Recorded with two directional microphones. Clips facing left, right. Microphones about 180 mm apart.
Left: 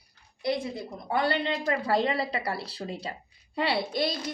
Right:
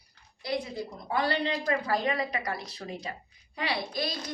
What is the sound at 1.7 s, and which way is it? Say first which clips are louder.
Speech: left 3 dB; 25° left (ahead or behind).